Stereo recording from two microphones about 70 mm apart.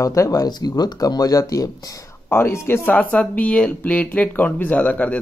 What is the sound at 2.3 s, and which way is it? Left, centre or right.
Speech, left.